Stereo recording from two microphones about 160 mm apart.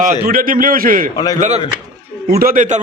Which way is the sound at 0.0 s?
60° right (ahead or behind).